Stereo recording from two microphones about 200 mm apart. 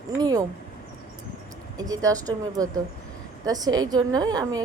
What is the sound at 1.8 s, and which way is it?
A woman's voice, 15° right (ahead or behind).